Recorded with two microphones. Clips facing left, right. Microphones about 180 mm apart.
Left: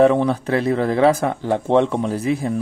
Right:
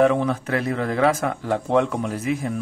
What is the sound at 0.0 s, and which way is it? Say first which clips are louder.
Speech: left 4 dB; 35° left (ahead or behind).